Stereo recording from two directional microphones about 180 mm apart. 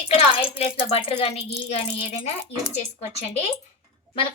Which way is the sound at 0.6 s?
35° left (ahead or behind).